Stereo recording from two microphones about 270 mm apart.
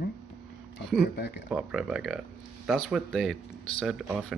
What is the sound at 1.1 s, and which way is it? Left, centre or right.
Speech, left.